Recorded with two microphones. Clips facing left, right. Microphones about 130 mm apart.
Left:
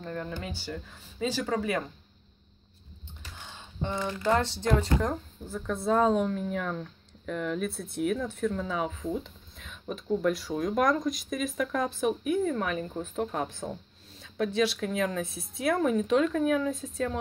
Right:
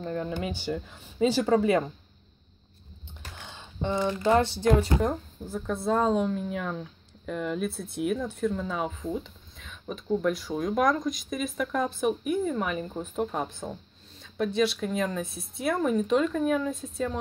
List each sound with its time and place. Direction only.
0.0 s speech: 25° right (ahead or behind)
3.8 s speech: 20° right (ahead or behind); by 17.2 s centre (ahead or behind)